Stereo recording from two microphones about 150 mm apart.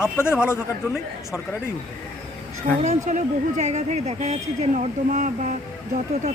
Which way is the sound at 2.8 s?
50° right (ahead or behind).